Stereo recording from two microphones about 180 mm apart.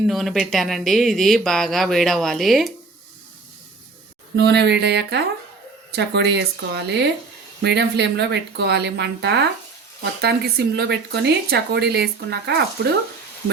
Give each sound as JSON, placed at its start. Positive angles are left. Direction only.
{"t": 0.1, "sound": "speech", "side_deg": 0}
{"t": 4.4, "sound": "a woman's voice", "side_deg": -65}